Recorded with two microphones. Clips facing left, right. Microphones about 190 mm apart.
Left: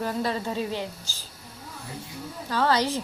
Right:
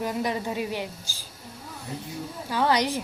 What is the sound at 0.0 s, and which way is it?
A woman's voice, 15° right (ahead or behind).